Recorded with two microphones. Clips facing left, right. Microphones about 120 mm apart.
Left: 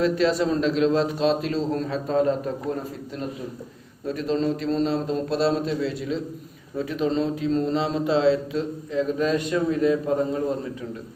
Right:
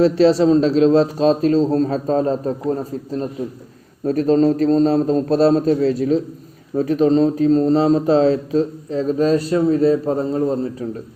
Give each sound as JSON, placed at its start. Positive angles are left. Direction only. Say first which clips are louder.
{"t": 0.0, "sound": "speech", "louder": "right 8 dB", "side_deg": -30}